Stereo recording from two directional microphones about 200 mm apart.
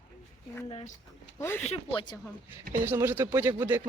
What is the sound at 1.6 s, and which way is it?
Speech, 30° left (ahead or behind).